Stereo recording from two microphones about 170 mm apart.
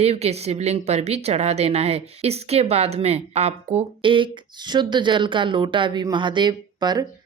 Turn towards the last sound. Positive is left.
turn(degrees=-25)  # may be behind; listen again after turning